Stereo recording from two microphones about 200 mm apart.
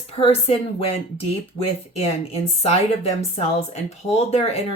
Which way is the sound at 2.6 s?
30° left (ahead or behind).